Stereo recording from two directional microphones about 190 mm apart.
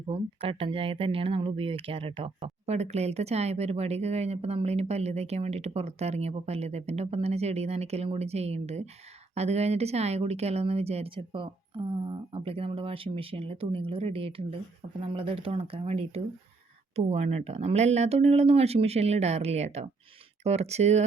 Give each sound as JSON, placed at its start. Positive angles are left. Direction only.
{"t": 0.1, "sound": "speech", "side_deg": -30}